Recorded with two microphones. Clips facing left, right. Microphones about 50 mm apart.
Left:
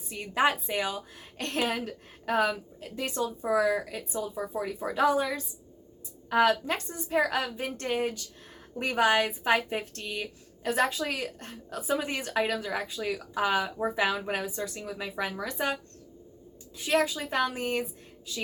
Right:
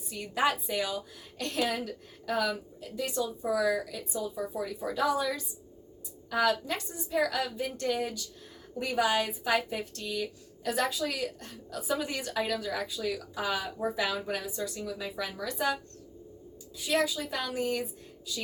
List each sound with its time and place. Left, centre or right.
0.1 s a woman's voice: left